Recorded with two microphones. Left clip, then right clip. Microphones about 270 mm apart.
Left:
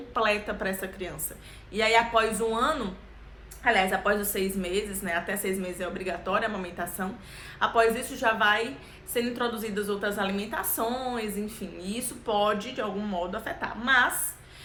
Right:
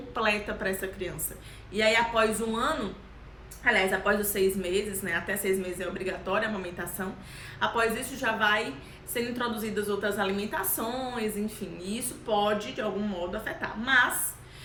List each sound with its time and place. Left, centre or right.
0.1 s a woman's voice: centre